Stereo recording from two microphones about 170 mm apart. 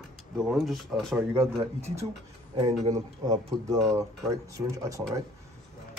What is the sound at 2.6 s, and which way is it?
Speech, 20° right (ahead or behind).